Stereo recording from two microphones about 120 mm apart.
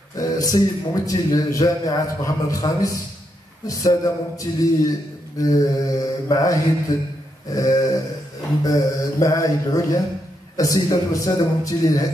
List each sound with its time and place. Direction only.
0.1 s a man's voice: 30° left (ahead or behind)